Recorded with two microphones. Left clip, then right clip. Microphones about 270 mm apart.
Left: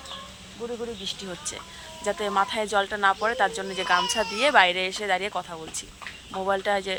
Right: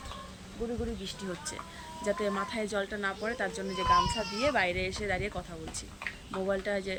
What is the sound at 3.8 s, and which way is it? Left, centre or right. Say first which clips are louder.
Speech: left 3 dB; left.